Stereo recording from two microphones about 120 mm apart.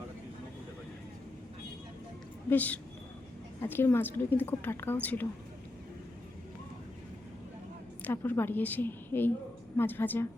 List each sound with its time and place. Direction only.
2.5 s a woman's voice: 15° left (ahead or behind)
8.0 s a woman's voice: 20° left (ahead or behind)